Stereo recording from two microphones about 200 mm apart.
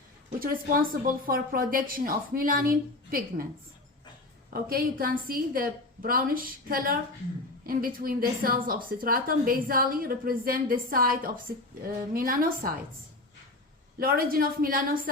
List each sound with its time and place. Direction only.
0.3 s a woman's voice: 45° right (ahead or behind)
4.5 s a woman's voice: 45° right (ahead or behind)
14.0 s a woman's voice: 45° right (ahead or behind)